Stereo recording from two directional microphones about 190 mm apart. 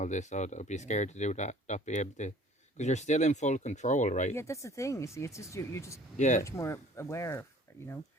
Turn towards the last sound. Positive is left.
turn(degrees=15)  # may be behind; listen again after turning